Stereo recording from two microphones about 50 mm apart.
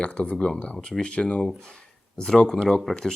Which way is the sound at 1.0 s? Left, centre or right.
Left.